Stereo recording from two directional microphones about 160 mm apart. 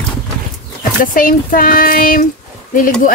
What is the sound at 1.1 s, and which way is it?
Child singing, 60° left (ahead or behind).